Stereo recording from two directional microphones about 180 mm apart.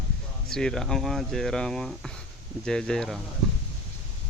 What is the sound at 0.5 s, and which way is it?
Speech, 5° left (ahead or behind).